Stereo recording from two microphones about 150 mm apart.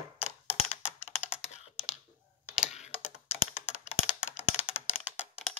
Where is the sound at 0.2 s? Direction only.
10° right (ahead or behind).